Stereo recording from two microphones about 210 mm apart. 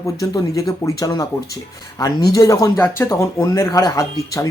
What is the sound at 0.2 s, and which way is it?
Speech, 15° left (ahead or behind).